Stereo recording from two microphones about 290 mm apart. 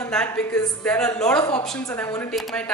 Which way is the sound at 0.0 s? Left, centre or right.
Centre.